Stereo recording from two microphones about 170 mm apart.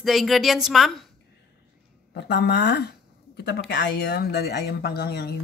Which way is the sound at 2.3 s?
80° left.